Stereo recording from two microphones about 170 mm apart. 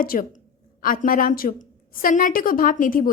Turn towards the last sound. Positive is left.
turn(degrees=55)  # may be behind; listen again after turning